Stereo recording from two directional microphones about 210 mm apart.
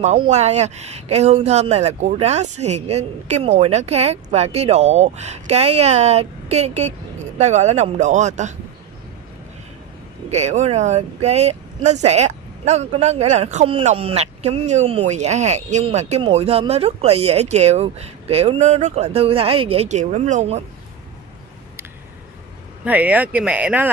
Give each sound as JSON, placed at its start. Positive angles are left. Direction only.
{"t": 0.0, "sound": "speech", "side_deg": -30}
{"t": 10.3, "sound": "speech", "side_deg": -30}
{"t": 22.8, "sound": "speech", "side_deg": -5}